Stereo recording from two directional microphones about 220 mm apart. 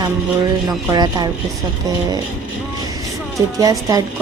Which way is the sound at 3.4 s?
15° right (ahead or behind).